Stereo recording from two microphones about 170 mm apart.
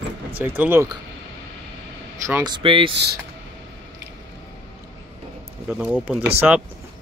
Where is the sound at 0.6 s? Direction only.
10° right (ahead or behind).